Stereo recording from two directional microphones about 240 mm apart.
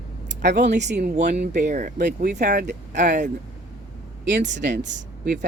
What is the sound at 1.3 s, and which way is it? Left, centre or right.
Speech, right.